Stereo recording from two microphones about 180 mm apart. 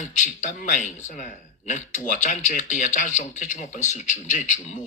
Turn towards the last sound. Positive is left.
turn(degrees=40)  # may be behind; listen again after turning